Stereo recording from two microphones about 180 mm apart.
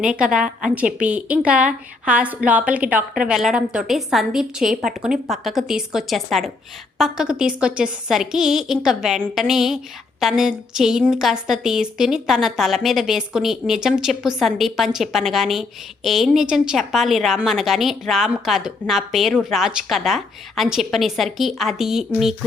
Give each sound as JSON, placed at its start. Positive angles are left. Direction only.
{"t": 0.0, "sound": "a woman's voice", "side_deg": -5}